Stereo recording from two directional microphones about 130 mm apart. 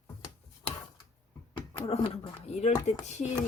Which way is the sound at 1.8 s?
45° left (ahead or behind).